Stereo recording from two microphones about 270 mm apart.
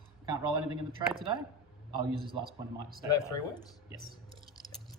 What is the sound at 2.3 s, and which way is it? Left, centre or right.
Speech, right.